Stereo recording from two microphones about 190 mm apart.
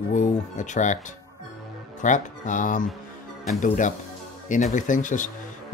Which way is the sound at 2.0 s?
40° left (ahead or behind).